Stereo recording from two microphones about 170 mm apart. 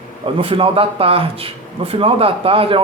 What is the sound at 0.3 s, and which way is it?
Speech, 30° right (ahead or behind).